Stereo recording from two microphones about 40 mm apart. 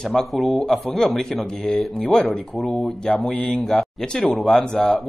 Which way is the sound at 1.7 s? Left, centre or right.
Left.